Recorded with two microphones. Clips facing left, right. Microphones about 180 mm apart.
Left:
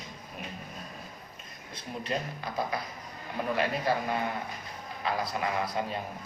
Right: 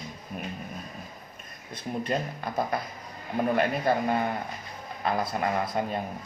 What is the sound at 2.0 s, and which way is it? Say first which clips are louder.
A man's voice: right 1 dB; 50° right (ahead or behind).